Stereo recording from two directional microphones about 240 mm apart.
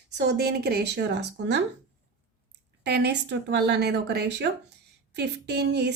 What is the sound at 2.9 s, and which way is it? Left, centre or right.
Speech, right.